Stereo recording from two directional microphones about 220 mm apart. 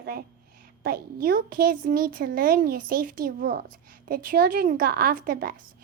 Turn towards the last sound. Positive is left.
turn(degrees=-40)  # may be behind; listen again after turning